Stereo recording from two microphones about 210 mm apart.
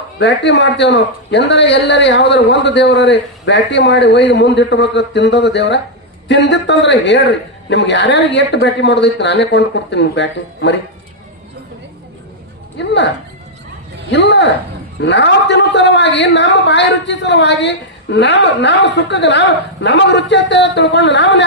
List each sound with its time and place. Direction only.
0.2 s a man's voice: 55° left (ahead or behind)
12.8 s a man's voice: 55° left (ahead or behind)
14.1 s a man's voice: 55° left (ahead or behind)